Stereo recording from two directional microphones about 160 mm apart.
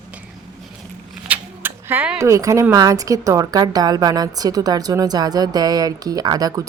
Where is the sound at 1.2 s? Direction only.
10° right (ahead or behind).